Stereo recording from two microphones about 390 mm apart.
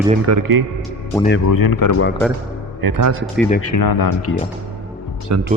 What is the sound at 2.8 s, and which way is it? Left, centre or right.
Speech, right.